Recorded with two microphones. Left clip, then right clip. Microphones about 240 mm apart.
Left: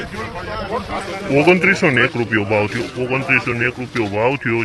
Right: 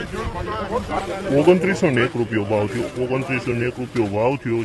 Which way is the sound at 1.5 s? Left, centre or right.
Centre.